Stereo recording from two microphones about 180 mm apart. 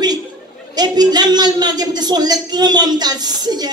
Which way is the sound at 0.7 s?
20° right (ahead or behind).